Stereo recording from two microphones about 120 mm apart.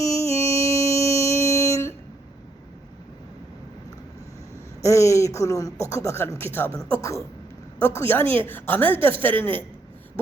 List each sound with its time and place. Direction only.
0.0 s music: 25° left (ahead or behind)
4.8 s a woman's voice: 25° left (ahead or behind)